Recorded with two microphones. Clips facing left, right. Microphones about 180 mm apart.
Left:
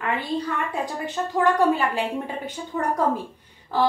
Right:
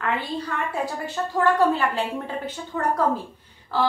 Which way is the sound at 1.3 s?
15° left (ahead or behind).